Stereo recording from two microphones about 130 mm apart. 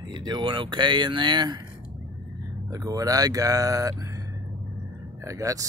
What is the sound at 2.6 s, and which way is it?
Speech, 30° right (ahead or behind).